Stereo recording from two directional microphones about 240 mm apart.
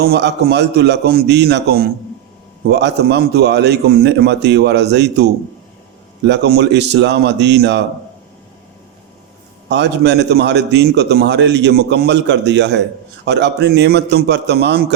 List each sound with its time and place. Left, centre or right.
0.0 s a man's voice: right
9.6 s a man's voice: right